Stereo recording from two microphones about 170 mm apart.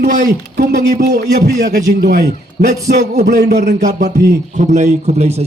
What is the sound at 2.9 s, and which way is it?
A man's voice, 45° right (ahead or behind).